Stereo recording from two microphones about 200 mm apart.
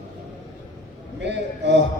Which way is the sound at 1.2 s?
60° right (ahead or behind).